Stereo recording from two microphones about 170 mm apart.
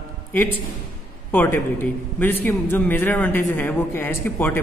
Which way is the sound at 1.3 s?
10° left (ahead or behind).